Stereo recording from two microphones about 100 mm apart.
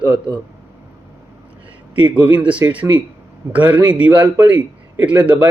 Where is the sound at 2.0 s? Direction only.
15° right (ahead or behind).